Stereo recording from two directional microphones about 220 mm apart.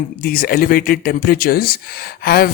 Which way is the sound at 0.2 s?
45° left (ahead or behind).